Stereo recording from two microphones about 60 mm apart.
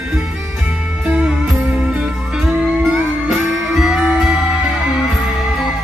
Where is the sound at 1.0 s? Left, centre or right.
Centre.